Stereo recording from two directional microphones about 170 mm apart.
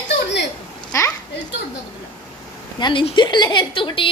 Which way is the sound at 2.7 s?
25° left (ahead or behind).